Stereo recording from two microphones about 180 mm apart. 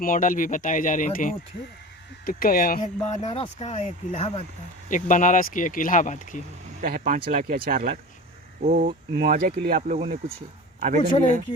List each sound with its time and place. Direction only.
0.0 s speech: 50° left (ahead or behind)
4.9 s speech: 45° left (ahead or behind)
6.8 s speech: 50° right (ahead or behind); by 10.3 s 35° right (ahead or behind)